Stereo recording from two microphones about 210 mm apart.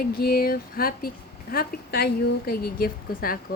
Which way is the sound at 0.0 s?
45° left (ahead or behind).